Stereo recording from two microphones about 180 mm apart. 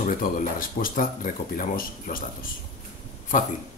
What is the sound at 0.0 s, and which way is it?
Speech, 50° left (ahead or behind).